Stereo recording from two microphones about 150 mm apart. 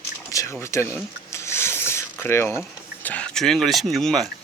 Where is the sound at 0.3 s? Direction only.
20° left (ahead or behind).